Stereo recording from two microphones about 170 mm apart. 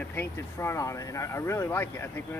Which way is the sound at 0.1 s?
15° left (ahead or behind).